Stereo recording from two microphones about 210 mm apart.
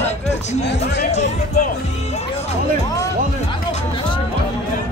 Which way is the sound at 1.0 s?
30° left (ahead or behind).